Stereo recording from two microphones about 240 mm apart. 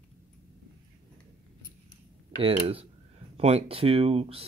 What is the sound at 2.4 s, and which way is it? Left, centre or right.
Speech, right.